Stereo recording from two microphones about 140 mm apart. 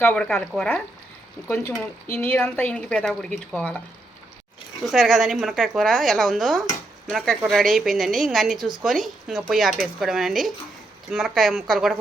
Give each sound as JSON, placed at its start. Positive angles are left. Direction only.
{"t": 0.0, "sound": "speech", "side_deg": 10}
{"t": 1.5, "sound": "speech", "side_deg": 15}
{"t": 4.9, "sound": "speech", "side_deg": 0}